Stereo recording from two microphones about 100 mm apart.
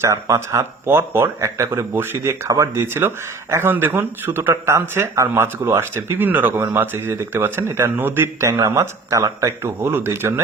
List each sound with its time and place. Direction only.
0.0 s speech: 30° right (ahead or behind)